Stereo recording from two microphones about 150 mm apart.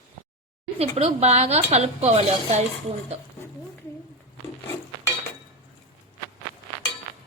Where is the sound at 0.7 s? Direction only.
40° right (ahead or behind).